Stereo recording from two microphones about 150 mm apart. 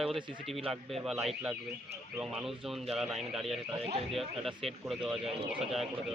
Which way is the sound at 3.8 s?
40° right (ahead or behind).